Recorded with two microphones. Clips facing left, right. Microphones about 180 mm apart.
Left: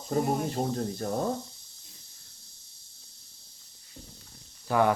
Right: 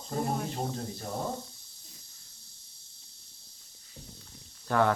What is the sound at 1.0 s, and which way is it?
Speech, 50° left (ahead or behind).